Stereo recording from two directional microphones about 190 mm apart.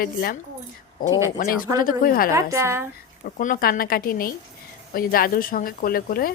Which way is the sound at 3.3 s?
45° left (ahead or behind).